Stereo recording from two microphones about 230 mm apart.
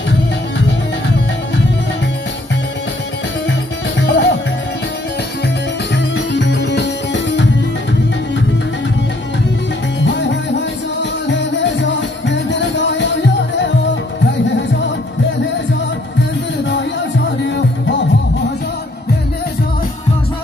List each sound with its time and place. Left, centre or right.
0.6 s music: left
4.0 s music: left
5.9 s music: left
9.9 s music: left